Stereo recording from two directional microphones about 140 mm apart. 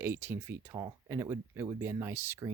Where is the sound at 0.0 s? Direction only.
15° right (ahead or behind).